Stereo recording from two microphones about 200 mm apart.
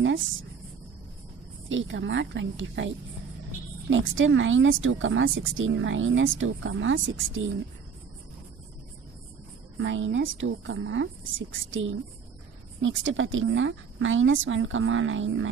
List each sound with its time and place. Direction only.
1.7 s a woman's voice: 70° right (ahead or behind)
3.9 s speech: 70° right (ahead or behind)
9.8 s speech: 75° right (ahead or behind)